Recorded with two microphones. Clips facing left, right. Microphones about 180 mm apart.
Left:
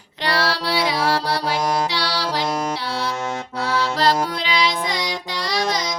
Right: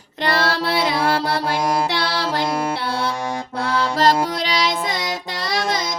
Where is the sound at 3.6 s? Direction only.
45° right (ahead or behind).